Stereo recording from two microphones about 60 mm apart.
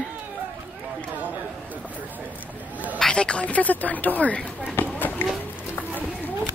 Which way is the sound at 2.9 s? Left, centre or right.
Centre.